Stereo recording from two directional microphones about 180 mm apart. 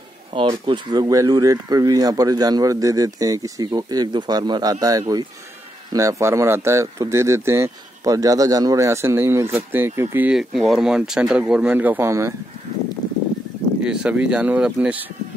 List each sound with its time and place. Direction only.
0.3 s speech: 30° right (ahead or behind); by 12.4 s 15° right (ahead or behind)
13.8 s speech: 5° right (ahead or behind)